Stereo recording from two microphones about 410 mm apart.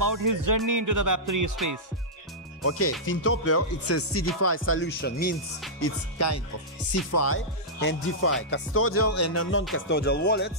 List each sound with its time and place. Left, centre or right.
0.0 s speech: right
2.6 s speech: left
5.8 s speech: left